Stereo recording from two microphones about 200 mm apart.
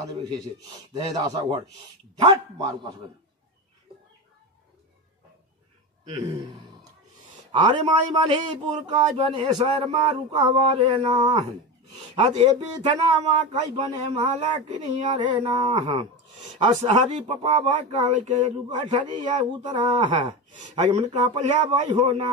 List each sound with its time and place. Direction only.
0.0 s a man's voice: 20° right (ahead or behind)
6.0 s a man's voice: 20° right (ahead or behind)
19.6 s a man's voice: 20° right (ahead or behind)